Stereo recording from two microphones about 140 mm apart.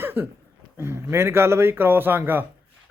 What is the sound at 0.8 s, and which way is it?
Speech, 20° right (ahead or behind).